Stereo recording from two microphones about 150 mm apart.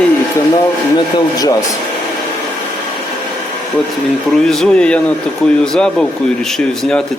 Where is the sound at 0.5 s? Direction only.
30° left (ahead or behind).